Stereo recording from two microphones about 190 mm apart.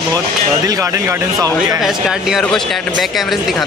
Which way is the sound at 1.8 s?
Centre (ahead or behind).